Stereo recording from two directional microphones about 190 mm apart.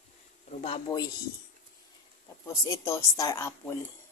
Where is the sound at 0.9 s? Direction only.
20° left (ahead or behind).